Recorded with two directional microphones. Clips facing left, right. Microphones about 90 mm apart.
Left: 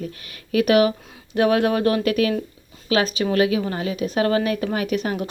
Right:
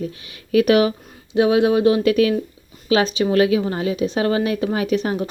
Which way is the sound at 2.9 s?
30° right (ahead or behind).